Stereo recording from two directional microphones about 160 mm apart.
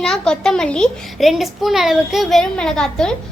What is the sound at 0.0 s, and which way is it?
A child's voice, 5° left (ahead or behind).